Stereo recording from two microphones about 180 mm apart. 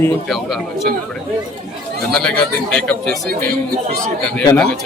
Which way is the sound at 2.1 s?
5° left (ahead or behind).